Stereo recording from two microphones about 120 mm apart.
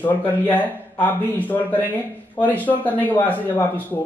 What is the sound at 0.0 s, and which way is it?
Speech, 15° left (ahead or behind).